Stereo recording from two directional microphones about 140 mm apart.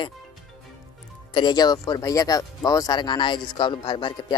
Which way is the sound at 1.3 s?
30° left (ahead or behind).